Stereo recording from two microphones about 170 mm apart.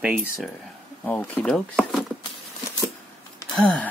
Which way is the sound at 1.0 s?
10° left (ahead or behind).